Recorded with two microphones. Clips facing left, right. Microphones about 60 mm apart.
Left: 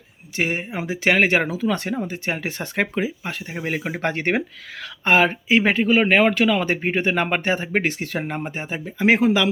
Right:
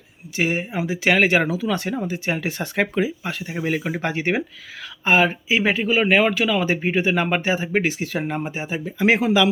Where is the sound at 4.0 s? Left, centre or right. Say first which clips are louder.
Left 1 dB; left.